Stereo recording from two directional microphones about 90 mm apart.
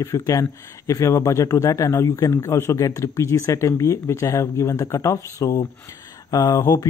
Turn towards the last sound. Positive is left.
turn(degrees=40)  # may be behind; listen again after turning